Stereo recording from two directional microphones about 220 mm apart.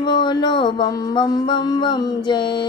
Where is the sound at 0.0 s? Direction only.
20° left (ahead or behind).